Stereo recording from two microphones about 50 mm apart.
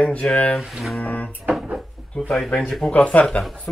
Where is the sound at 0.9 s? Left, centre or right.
Left.